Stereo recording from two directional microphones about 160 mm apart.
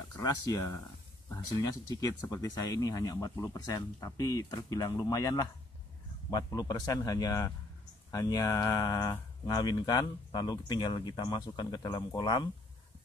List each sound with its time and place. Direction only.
0.2 s speech: 20° left (ahead or behind)